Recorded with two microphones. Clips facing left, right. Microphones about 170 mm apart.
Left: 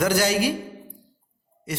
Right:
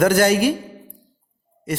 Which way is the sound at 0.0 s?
50° right (ahead or behind).